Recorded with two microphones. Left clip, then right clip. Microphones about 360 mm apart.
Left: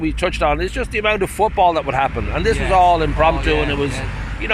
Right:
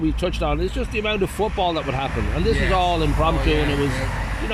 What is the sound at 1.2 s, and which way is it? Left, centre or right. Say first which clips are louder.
Speech: left 7 dB; left.